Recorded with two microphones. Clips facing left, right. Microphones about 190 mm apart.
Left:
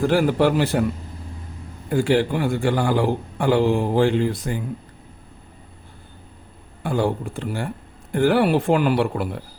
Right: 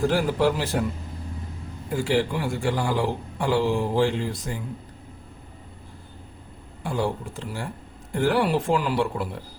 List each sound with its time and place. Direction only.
0.1 s a man's voice: 60° left (ahead or behind)
1.9 s a man's voice: 55° left (ahead or behind)
6.8 s a man's voice: 55° left (ahead or behind)